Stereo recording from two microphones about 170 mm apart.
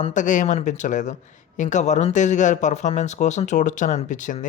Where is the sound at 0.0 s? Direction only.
45° left (ahead or behind).